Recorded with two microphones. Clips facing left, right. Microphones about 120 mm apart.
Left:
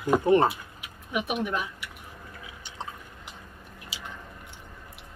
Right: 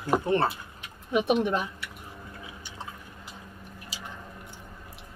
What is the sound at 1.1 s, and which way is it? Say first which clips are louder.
Speech: right 5 dB; 30° right (ahead or behind).